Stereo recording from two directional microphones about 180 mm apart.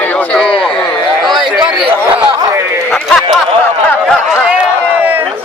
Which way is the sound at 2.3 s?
20° right (ahead or behind).